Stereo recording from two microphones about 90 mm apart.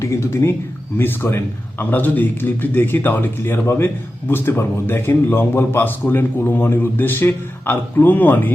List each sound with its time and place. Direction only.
0.0 s a man's voice: 30° left (ahead or behind)